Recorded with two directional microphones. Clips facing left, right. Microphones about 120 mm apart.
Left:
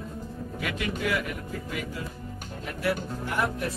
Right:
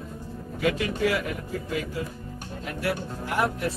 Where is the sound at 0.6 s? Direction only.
25° right (ahead or behind).